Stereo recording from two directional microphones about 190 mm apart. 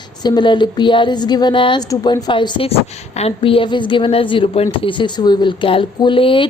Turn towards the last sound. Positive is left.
turn(degrees=25)  # may be behind; listen again after turning